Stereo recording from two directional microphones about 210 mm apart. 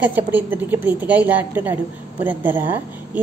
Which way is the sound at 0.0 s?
10° right (ahead or behind).